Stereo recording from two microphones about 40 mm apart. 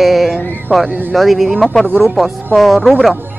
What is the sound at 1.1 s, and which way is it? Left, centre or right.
Speech, centre.